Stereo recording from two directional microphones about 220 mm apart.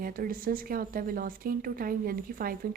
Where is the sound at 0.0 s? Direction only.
40° right (ahead or behind).